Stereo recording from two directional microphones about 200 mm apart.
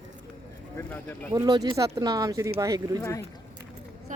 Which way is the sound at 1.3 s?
20° right (ahead or behind).